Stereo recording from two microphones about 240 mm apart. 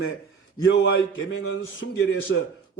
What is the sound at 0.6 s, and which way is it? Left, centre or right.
A man's voice, left.